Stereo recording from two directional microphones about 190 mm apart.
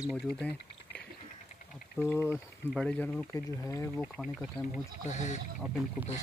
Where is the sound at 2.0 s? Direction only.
10° left (ahead or behind).